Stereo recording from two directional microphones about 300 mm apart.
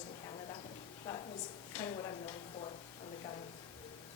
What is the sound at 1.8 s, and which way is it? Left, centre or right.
Speech, centre.